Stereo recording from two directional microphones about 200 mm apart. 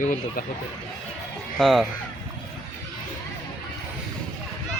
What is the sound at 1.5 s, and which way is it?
Speech, centre (ahead or behind).